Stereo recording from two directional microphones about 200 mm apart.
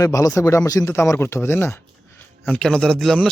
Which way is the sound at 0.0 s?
15° left (ahead or behind).